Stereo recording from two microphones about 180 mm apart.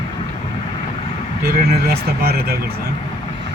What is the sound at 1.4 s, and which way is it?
Vehicle, 55° right (ahead or behind).